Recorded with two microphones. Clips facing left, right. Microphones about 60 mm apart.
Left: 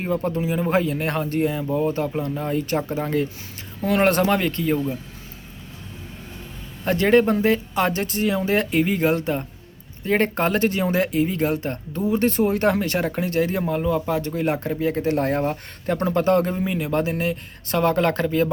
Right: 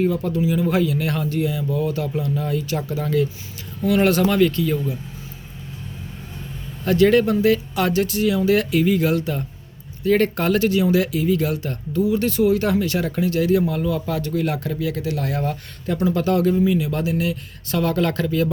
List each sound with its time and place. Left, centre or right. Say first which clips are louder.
0.0 s speech: right 3 dB; left
6.8 s speech: right 1 dB; left